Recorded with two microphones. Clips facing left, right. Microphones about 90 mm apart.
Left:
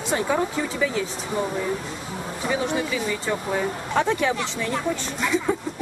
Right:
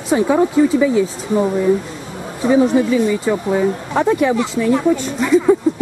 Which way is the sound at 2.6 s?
Centre (ahead or behind).